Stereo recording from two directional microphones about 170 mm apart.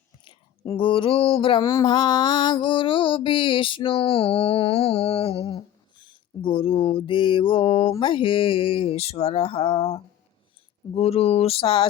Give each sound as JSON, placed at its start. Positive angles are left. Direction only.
{"t": 0.3, "sound": "speech", "side_deg": 30}
{"t": 1.6, "sound": "mantra", "side_deg": 20}
{"t": 2.6, "sound": "a sound", "side_deg": 30}